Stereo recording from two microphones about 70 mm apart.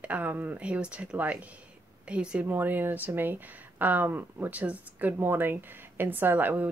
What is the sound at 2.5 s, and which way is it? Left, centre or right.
Speech, right.